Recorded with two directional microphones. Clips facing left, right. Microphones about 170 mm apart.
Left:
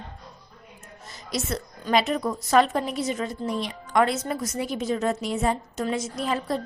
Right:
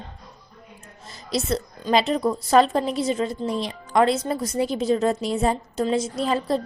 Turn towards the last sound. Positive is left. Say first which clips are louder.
# right 4 dB
turn(degrees=-30)  # may be behind; listen again after turning